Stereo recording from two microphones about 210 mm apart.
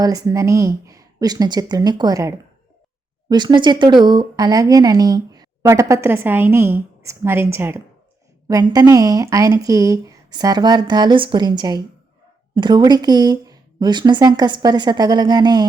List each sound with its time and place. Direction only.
0.0 s speech: 15° right (ahead or behind)